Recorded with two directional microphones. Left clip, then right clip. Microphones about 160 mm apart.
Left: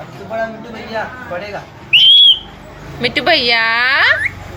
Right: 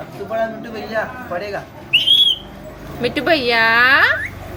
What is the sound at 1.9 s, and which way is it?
Whistle, 15° right (ahead or behind).